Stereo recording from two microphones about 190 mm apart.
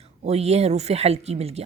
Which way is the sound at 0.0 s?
35° right (ahead or behind).